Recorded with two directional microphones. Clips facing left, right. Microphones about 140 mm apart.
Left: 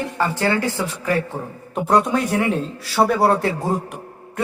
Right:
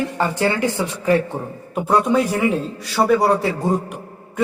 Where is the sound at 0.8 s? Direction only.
20° right (ahead or behind).